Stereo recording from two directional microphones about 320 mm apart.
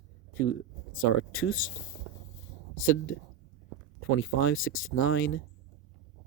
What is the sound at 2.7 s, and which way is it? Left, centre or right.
Speech, left.